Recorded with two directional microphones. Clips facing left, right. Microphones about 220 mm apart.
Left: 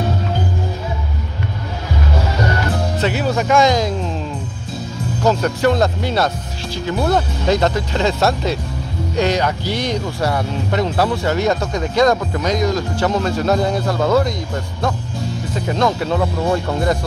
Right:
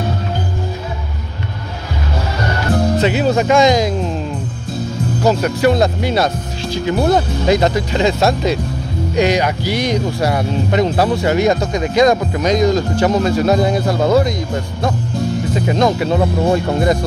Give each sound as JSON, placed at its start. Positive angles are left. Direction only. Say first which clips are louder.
{"t": 3.0, "sound": "speech", "louder": "right 1 dB", "side_deg": -20}
{"t": 5.2, "sound": "speech", "louder": "right 2 dB", "side_deg": -10}
{"t": 15.5, "sound": "speech", "louder": "right 2 dB", "side_deg": -15}